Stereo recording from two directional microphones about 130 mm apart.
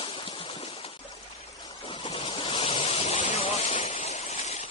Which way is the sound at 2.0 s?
50° left (ahead or behind).